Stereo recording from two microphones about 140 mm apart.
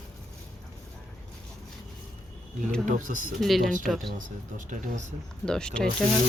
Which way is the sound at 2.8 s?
70° right (ahead or behind).